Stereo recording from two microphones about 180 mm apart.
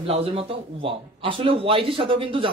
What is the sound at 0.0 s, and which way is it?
A man's voice, 30° right (ahead or behind).